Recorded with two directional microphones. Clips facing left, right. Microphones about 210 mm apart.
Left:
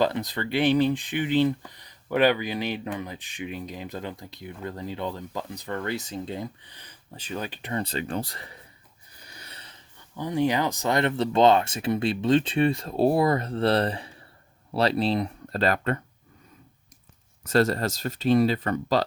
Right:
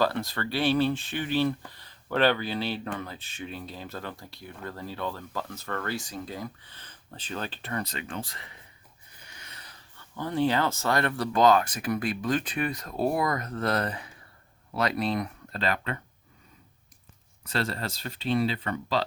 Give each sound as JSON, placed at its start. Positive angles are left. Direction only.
{"t": 0.0, "sound": "speech", "side_deg": 20}
{"t": 9.2, "sound": "a sound", "side_deg": 35}
{"t": 10.2, "sound": "speech", "side_deg": 15}
{"t": 15.6, "sound": "speech", "side_deg": 45}
{"t": 17.4, "sound": "speech", "side_deg": 45}